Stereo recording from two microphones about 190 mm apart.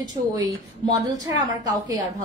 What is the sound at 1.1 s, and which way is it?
Speech, 20° right (ahead or behind).